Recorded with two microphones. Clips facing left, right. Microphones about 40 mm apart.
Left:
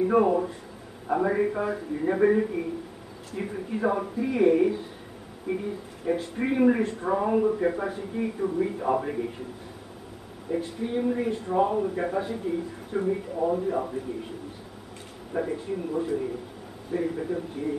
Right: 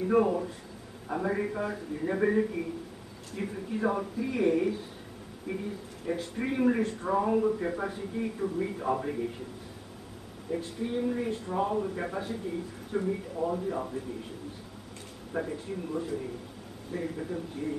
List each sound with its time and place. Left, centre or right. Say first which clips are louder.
0.0 s speech: left 4 dB; centre
10.5 s speech: left 4 dB; centre
15.4 s speech: left 5 dB; centre